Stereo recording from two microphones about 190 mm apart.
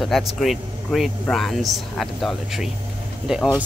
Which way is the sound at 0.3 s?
Centre (ahead or behind).